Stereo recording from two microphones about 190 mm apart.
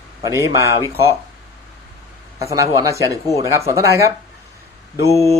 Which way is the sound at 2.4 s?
15° right (ahead or behind).